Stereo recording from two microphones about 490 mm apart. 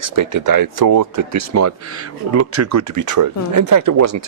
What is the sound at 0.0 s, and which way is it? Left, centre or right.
Speech, right.